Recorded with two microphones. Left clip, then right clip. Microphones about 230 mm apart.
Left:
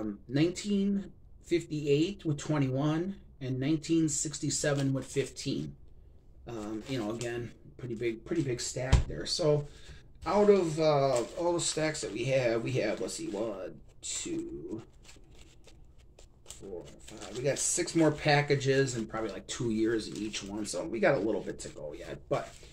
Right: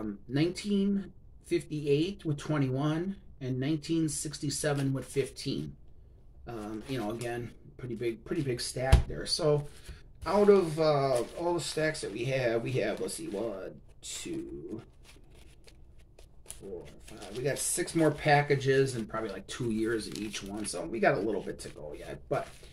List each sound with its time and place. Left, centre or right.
0.0 s speech: centre
17.0 s speech: centre